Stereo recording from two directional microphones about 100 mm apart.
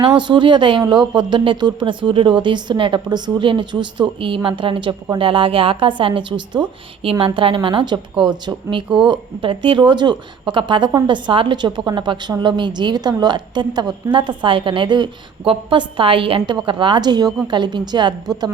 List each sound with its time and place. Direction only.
0.2 s a woman's voice: 55° right (ahead or behind)
7.0 s a woman's voice: 70° right (ahead or behind); by 18.1 s 50° right (ahead or behind)